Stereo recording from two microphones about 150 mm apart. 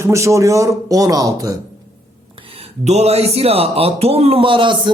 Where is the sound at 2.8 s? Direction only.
45° right (ahead or behind).